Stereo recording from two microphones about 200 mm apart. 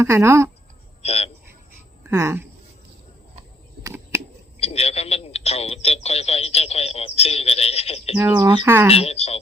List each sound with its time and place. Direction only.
0.0 s speech: 15° right (ahead or behind)
1.0 s a sound: 30° left (ahead or behind)
2.0 s speech: 15° right (ahead or behind)
3.8 s a sound: 15° right (ahead or behind)
4.6 s speech: 30° left (ahead or behind)
8.1 s speech: 15° right (ahead or behind)
8.9 s speech: 30° left (ahead or behind)